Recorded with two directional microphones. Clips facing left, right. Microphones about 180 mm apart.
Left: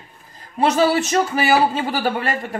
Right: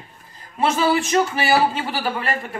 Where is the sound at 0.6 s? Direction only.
40° left (ahead or behind).